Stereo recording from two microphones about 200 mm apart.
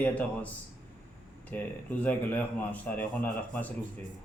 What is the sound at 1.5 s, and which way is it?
A man's voice, 10° left (ahead or behind).